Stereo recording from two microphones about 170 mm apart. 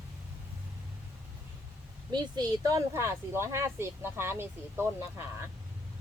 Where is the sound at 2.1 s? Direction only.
25° right (ahead or behind).